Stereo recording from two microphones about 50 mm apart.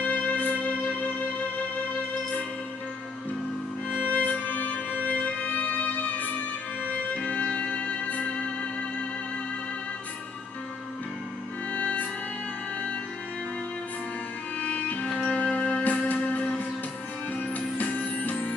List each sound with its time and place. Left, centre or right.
0.0 s music: left
4.1 s music: left
11.7 s music: left
14.6 s music: left